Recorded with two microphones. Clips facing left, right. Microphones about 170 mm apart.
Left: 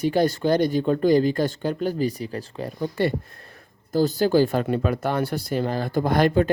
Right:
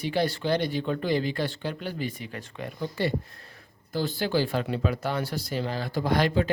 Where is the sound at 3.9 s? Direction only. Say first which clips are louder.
Left 8 dB; 40° left (ahead or behind).